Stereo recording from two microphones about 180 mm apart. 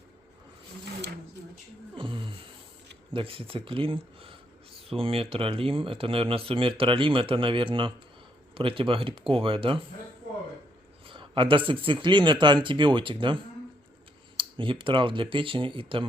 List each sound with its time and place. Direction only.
2.0 s a sound: 30° right (ahead or behind)
3.1 s speech: 30° right (ahead or behind)
11.0 s speech: 25° right (ahead or behind)